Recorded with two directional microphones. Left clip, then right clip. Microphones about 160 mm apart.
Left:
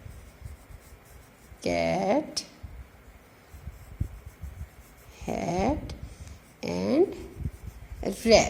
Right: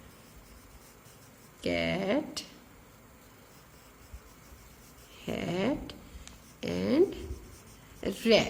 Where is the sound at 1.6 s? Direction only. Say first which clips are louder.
Left 5 dB; 15° left (ahead or behind).